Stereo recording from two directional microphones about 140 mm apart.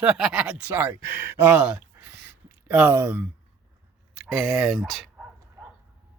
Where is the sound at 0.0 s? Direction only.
5° right (ahead or behind).